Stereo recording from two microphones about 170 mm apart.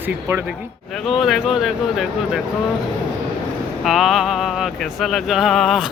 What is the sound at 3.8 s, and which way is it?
Speech, centre (ahead or behind).